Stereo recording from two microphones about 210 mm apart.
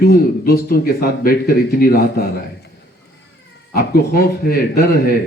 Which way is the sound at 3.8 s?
45° left (ahead or behind).